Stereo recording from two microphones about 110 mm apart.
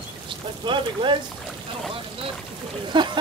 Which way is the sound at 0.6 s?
45° right (ahead or behind).